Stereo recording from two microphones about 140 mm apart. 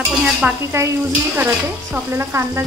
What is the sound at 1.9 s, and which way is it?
Stir, 15° right (ahead or behind).